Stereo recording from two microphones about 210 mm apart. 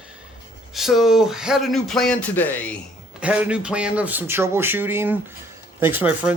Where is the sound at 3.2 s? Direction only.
5° right (ahead or behind).